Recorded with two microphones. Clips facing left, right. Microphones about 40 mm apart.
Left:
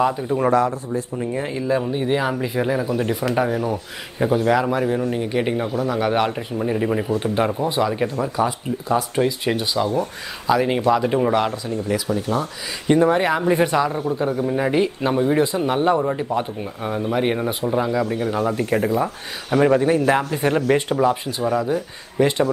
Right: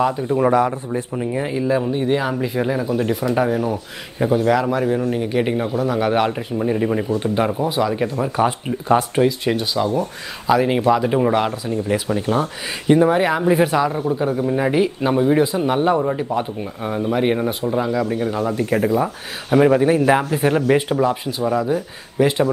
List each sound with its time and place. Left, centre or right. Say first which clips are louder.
0.0 s speech: right 2 dB; centre
0.5 s speech: even; centre
1.2 s speech: right 5 dB; centre
8.4 s speech: right 4 dB; right
9.2 s speech: right 3 dB; centre
11.6 s speech: right 2 dB; centre
12.1 s speech: right 3 dB; right
12.8 s speech: right 2 dB; centre
18.4 s speech: even; centre
19.5 s speech: right 2 dB; centre